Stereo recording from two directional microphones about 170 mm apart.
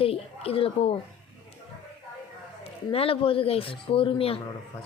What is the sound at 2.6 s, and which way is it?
A man's voice, 35° left (ahead or behind).